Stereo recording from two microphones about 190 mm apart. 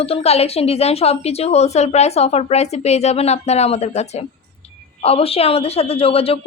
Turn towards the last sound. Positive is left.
turn(degrees=30)  # may be behind; listen again after turning